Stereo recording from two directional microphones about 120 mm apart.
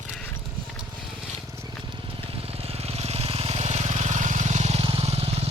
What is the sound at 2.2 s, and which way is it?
Vehicle, 50° right (ahead or behind).